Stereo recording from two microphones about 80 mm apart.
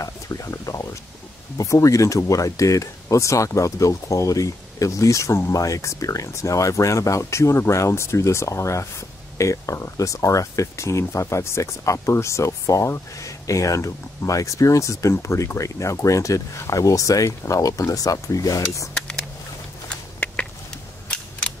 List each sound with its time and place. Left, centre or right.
0.0 s speech: left
19.9 s a sound: centre
21.1 s cap gun: centre